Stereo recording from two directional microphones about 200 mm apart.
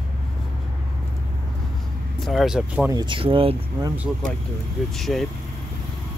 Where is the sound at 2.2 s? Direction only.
Centre (ahead or behind).